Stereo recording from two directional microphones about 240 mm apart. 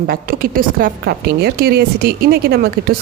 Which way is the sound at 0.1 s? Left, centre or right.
Right.